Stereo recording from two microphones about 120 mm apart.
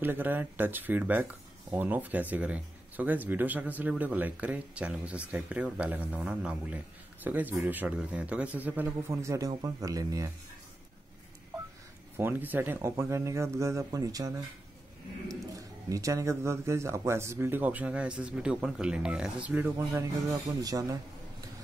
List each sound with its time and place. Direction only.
0.0 s speech: 15° right (ahead or behind)
12.2 s speech: 15° right (ahead or behind)
15.9 s speech: 25° right (ahead or behind)
20.0 s speech: 30° right (ahead or behind)